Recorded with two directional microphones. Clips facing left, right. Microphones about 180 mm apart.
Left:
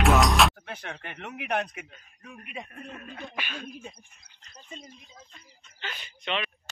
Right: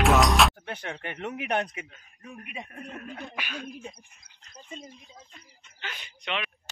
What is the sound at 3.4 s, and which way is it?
Music, 5° right (ahead or behind).